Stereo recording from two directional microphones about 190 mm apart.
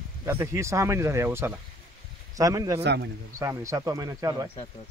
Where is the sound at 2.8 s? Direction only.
65° right (ahead or behind).